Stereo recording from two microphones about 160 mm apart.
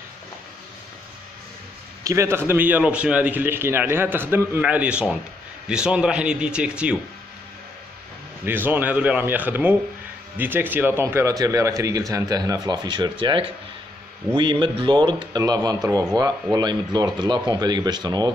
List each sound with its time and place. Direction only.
2.0 s a man's voice: 15° right (ahead or behind)
8.5 s a man's voice: 10° right (ahead or behind)